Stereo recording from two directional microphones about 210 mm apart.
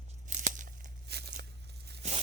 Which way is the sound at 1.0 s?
50° right (ahead or behind).